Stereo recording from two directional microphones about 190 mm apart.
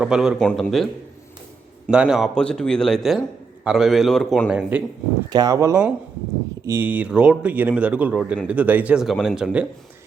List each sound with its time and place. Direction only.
0.0 s a man's voice: 5° right (ahead or behind)
1.9 s a man's voice: 5° right (ahead or behind)
5.3 s a man's voice: 20° right (ahead or behind)